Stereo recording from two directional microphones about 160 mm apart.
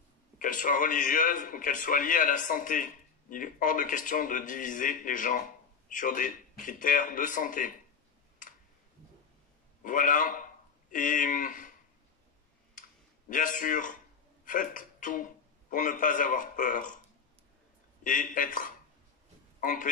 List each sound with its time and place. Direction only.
0.4 s a man's voice: 55° left (ahead or behind)
9.8 s speech: 55° left (ahead or behind)
13.3 s a man's voice: 55° left (ahead or behind)
18.0 s a man's voice: 55° left (ahead or behind)